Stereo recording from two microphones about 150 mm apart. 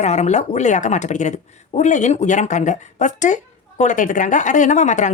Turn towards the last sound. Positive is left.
turn(degrees=50)  # may be behind; listen again after turning